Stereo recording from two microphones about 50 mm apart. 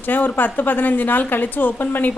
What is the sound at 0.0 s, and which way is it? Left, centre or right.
A woman's voice, left.